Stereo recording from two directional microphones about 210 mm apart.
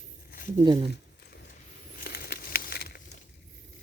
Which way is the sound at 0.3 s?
40° left (ahead or behind).